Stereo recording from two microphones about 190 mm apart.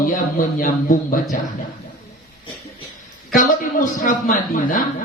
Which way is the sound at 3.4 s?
45° left (ahead or behind).